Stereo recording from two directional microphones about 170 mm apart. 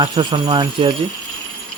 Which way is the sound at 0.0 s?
25° right (ahead or behind).